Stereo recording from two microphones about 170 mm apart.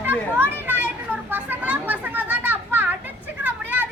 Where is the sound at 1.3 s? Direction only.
10° right (ahead or behind).